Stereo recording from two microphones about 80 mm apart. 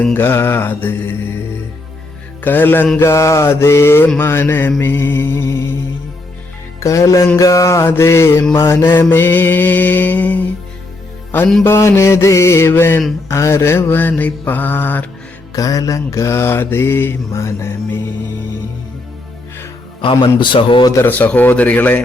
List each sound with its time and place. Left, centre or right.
0.1 s mantra: left
2.4 s mantra: left
3.0 s mantra: left
6.7 s music: left
7.3 s mantra: left
11.6 s mantra: left
15.5 s mantra: left
20.0 s a man's voice: left
21.0 s mantra: left